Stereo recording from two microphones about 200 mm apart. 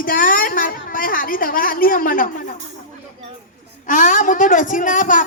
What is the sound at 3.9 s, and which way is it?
Speech, 40° left (ahead or behind).